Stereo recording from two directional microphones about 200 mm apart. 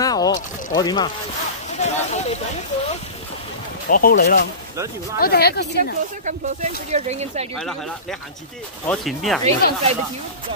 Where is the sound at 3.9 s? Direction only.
45° left (ahead or behind).